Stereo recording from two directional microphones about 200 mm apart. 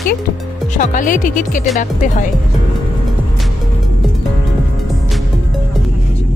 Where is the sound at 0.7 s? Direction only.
40° left (ahead or behind).